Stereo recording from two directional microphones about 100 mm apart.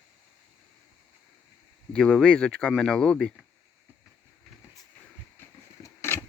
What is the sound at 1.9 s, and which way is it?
Speech, 10° left (ahead or behind).